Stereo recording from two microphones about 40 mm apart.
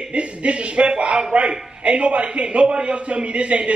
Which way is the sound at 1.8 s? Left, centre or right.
Right.